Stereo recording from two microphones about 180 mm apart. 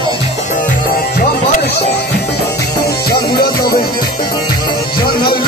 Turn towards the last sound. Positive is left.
turn(degrees=60)  # may be behind; listen again after turning